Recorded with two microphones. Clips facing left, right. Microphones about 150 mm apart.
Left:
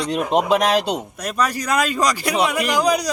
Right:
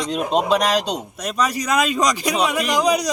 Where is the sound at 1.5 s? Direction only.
10° right (ahead or behind).